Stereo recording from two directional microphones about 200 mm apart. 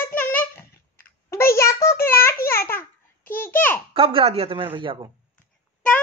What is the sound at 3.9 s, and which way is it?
A man's voice, 25° right (ahead or behind).